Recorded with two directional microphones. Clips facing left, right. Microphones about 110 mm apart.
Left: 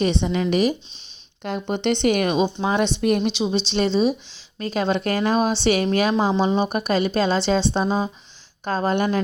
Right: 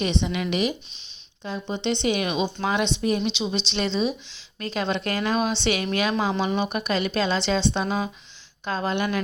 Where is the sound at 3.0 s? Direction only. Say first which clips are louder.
Left 4 dB; 55° left (ahead or behind); by 9.2 s 40° left (ahead or behind).